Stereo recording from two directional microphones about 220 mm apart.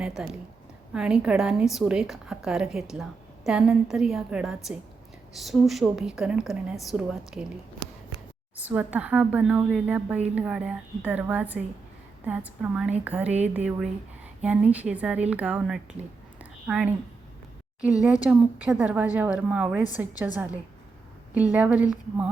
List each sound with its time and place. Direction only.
0.0 s a woman's voice: 5° right (ahead or behind)
8.5 s a woman's voice: 5° right (ahead or behind)
16.4 s a sound: 5° right (ahead or behind)
17.7 s speech: 15° left (ahead or behind)
18.0 s a woman's voice: 5° right (ahead or behind)